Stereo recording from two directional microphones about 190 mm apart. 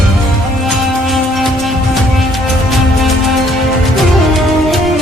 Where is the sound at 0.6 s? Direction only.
Centre (ahead or behind).